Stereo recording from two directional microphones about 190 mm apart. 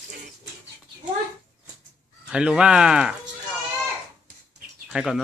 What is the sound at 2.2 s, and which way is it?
Speech, 5° right (ahead or behind).